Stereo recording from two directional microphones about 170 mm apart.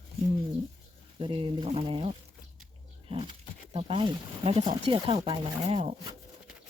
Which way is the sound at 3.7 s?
35° right (ahead or behind).